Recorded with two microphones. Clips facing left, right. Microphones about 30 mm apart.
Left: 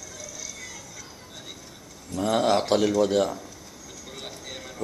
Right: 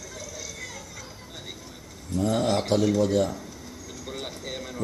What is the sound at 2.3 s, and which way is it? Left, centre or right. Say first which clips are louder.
Speech: left 3 dB; left.